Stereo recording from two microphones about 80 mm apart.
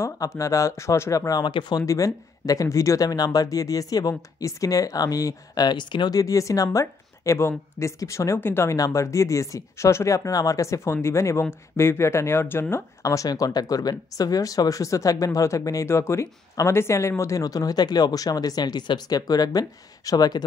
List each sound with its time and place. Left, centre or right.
0.4 s speech: left
1.4 s speech: left
1.8 s speech: left
6.1 s speech: left
8.7 s speech: left
13.0 s speech: left
17.2 s speech: left